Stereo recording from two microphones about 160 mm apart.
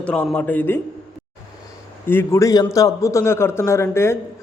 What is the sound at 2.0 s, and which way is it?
A man's voice, 15° left (ahead or behind).